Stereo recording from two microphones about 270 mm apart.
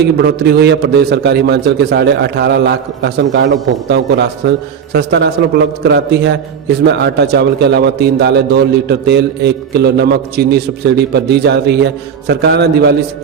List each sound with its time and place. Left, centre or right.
0.0 s a man's voice: right